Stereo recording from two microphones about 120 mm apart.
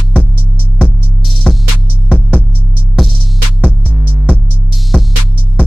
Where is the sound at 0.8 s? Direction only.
Centre (ahead or behind).